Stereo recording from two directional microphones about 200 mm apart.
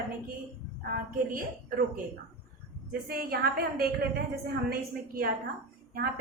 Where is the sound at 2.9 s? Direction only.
50° right (ahead or behind).